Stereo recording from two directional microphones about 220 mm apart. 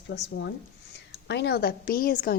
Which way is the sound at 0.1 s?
50° left (ahead or behind).